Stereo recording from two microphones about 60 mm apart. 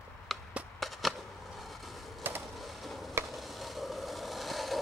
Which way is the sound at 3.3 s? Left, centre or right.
Centre.